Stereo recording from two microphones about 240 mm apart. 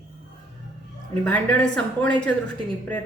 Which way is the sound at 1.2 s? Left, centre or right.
Centre.